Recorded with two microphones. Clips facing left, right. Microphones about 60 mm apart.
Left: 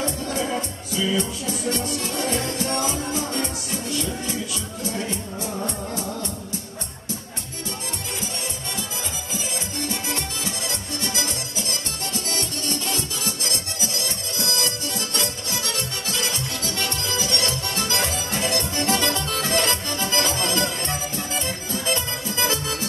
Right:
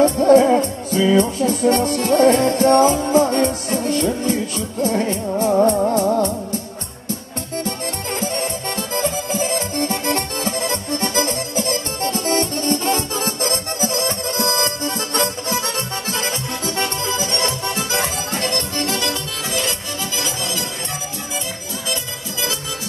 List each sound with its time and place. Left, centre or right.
0.0 s music: right
8.2 s music: right
17.8 s music: centre
18.4 s music: centre
18.9 s accordion: left
19.5 s music: left